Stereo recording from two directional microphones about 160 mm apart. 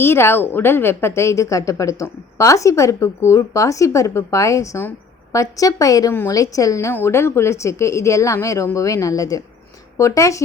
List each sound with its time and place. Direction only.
0.0 s a woman's voice: 15° left (ahead or behind)